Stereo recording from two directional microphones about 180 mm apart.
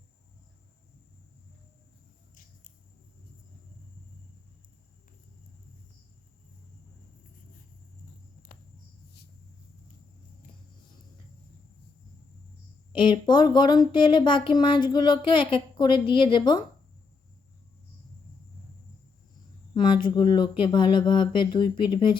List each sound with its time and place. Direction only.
8.5 s cricket: 50° left (ahead or behind)
12.9 s speech: 25° left (ahead or behind)
19.7 s speech: 25° left (ahead or behind)